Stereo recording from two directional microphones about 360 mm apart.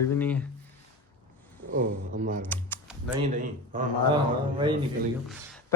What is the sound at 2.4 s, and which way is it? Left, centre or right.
Typing, centre.